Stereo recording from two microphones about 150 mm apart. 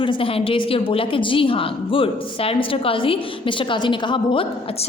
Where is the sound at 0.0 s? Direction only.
35° left (ahead or behind).